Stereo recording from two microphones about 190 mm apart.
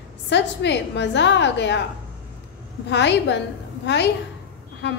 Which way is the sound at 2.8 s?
65° left (ahead or behind).